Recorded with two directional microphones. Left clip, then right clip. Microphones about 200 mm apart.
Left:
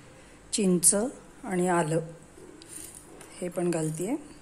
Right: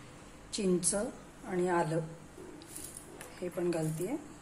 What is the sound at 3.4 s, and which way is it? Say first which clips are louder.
Speech: left 5 dB; 45° left (ahead or behind).